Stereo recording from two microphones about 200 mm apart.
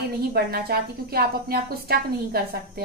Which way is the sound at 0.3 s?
50° right (ahead or behind).